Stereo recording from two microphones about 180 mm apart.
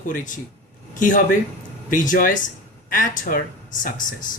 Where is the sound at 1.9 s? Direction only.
45° left (ahead or behind).